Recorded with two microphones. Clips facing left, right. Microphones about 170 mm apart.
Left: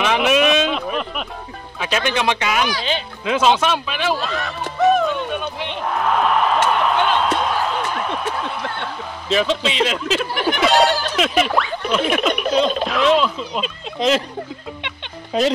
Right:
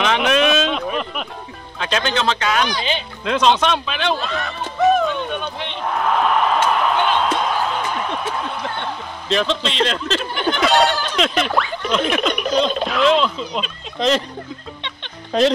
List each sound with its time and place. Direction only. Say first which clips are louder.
0.0 s a sound: left 1 dB; 5° left (ahead or behind)
1.8 s speech: even; 10° left (ahead or behind)
2.8 s music: even; 5° left (ahead or behind)
9.3 s speech: left 1 dB; 5° left (ahead or behind)